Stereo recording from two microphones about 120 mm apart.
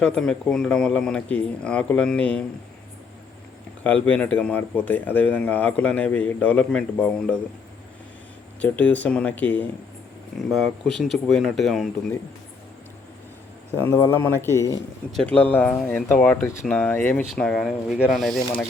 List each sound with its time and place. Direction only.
0.0 s speech: 5° left (ahead or behind)
3.8 s speech: 15° left (ahead or behind)
8.6 s speech: 15° left (ahead or behind)
10.5 s speech: 5° left (ahead or behind)
13.7 s speech: 20° left (ahead or behind)
15.1 s speech: 5° left (ahead or behind)